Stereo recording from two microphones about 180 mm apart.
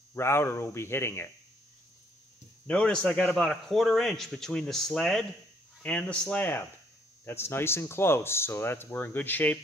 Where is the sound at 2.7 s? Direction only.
5° left (ahead or behind).